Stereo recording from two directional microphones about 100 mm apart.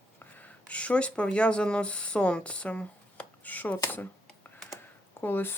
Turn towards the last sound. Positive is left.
turn(degrees=20)  # may be behind; listen again after turning